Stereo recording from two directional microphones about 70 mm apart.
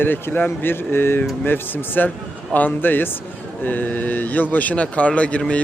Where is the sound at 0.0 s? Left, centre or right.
Left.